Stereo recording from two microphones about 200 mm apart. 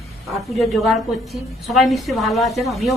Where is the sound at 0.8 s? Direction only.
Centre (ahead or behind).